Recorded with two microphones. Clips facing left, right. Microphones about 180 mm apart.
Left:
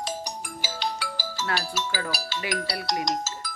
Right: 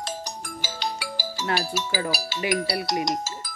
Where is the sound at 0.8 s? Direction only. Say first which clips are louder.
Even; 10° right (ahead or behind).